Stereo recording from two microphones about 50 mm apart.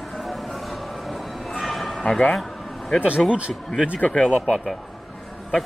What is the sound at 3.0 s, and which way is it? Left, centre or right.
Speech, centre.